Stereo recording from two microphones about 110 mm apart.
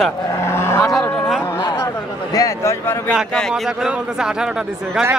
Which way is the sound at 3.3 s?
Centre (ahead or behind).